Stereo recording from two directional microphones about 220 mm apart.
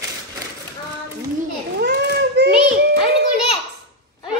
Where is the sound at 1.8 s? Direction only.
50° right (ahead or behind).